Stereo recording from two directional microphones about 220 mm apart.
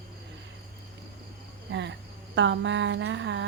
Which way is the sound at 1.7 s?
55° right (ahead or behind).